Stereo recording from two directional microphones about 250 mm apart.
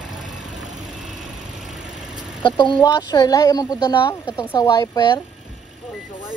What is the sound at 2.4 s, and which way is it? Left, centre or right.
Speech, centre.